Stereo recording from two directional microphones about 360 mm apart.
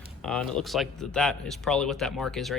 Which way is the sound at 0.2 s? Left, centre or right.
Centre.